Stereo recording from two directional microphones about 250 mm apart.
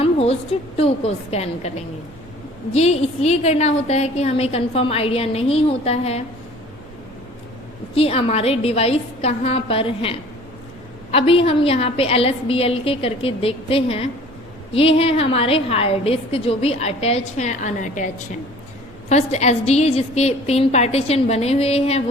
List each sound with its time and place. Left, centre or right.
0.0 s a sound: left
0.8 s a woman's voice: left
2.7 s a woman's voice: left
7.9 s a woman's voice: left